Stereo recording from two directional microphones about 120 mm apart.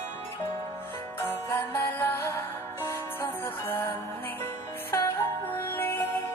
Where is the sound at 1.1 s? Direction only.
20° left (ahead or behind).